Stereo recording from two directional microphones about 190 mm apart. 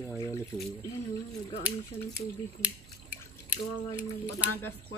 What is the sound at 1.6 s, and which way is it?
Speech, 10° right (ahead or behind).